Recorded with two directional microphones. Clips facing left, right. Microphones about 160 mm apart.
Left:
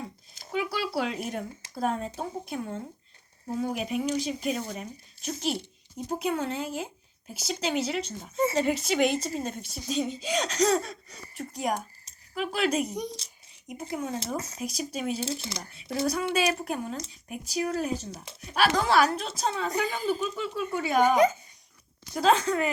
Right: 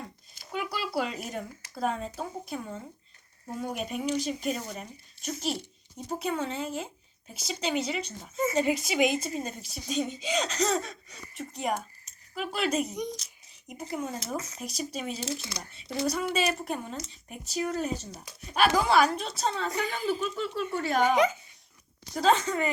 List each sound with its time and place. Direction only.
0.5 s a woman's voice: centre (ahead or behind)
8.4 s speech: 30° left (ahead or behind)
8.6 s a woman's voice: 5° right (ahead or behind)
12.9 s speech: 30° left (ahead or behind)
13.7 s a woman's voice: 5° right (ahead or behind)
14.3 s speech: 30° left (ahead or behind)
14.6 s speech: 5° left (ahead or behind)
15.2 s speech: 25° left (ahead or behind)
15.7 s a woman's voice: 5° left (ahead or behind)
21.0 s speech: 45° left (ahead or behind)
22.1 s a woman's voice: centre (ahead or behind)